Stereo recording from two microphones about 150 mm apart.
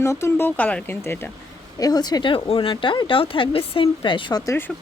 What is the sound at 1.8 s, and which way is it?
Speech, 25° left (ahead or behind).